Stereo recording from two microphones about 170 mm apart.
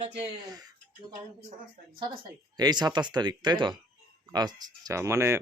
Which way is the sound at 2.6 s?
25° right (ahead or behind).